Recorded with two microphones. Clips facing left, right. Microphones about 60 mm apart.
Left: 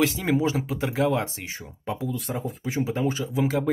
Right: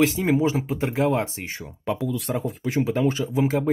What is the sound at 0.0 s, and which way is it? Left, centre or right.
Speech, right.